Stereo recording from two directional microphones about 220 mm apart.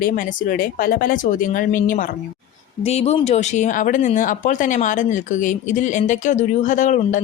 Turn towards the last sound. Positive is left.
turn(degrees=35)  # may be behind; listen again after turning